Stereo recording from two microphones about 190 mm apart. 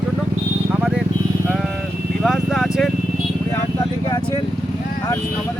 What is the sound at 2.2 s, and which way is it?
Vehicle, centre (ahead or behind).